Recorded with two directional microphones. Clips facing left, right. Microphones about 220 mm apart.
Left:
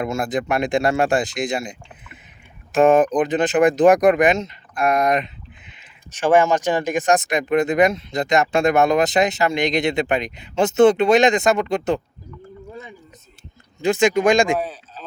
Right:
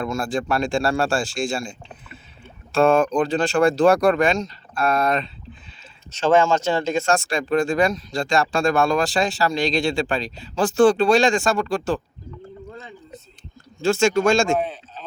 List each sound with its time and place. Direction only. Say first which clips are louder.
0.0 s speech: left 2 dB; 20° left (ahead or behind)
2.7 s speech: left 2 dB; 20° left (ahead or behind)
13.8 s speech: left 1 dB; 15° left (ahead or behind)